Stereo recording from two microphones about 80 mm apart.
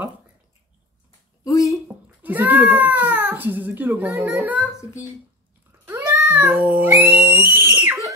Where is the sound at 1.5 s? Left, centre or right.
Left.